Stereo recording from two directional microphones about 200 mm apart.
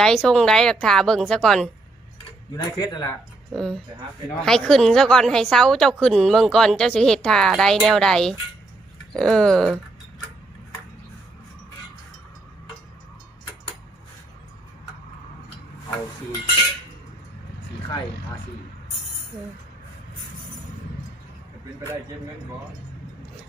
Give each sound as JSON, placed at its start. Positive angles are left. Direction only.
{"t": 0.0, "sound": "a woman's voice", "side_deg": 5}
{"t": 2.5, "sound": "speech", "side_deg": 20}
{"t": 3.5, "sound": "a woman's voice", "side_deg": 0}